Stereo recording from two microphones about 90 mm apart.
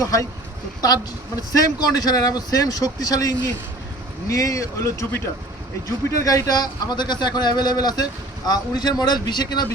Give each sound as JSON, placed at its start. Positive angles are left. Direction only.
{"t": 0.0, "sound": "speech", "side_deg": 40}
{"t": 1.5, "sound": "speech", "side_deg": 40}